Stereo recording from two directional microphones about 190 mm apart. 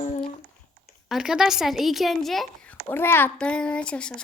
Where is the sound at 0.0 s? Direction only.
30° left (ahead or behind).